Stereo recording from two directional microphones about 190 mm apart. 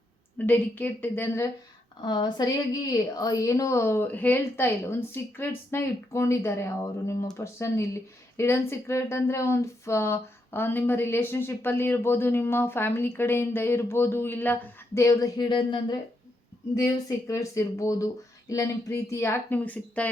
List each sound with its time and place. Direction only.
0.3 s speech: 10° left (ahead or behind)
2.0 s speech: 25° left (ahead or behind); by 20.1 s 10° left (ahead or behind)